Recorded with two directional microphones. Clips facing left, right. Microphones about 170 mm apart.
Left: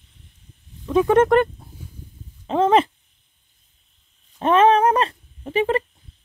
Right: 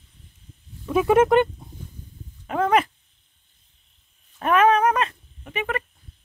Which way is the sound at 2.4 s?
25° left (ahead or behind).